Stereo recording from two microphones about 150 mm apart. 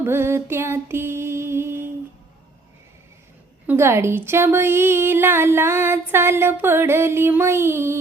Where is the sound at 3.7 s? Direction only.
15° right (ahead or behind).